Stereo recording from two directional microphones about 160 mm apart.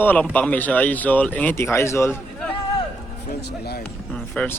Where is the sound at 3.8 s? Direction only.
5° left (ahead or behind).